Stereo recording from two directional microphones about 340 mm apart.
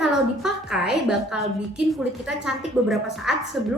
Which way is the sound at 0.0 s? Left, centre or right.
Centre.